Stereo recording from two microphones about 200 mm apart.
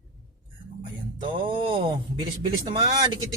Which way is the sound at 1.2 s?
25° right (ahead or behind).